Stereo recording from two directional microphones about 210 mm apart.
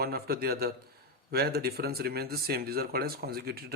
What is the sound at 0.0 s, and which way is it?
Speech, 45° right (ahead or behind).